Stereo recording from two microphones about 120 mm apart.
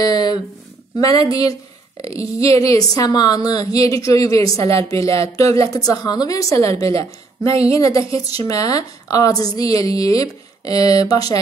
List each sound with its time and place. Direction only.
0.0 s speech: 35° left (ahead or behind)
7.4 s speech: 55° right (ahead or behind)
7.7 s a woman's voice: 30° left (ahead or behind)